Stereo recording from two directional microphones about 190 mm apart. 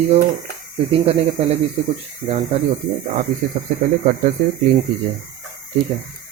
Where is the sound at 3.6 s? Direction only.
35° right (ahead or behind).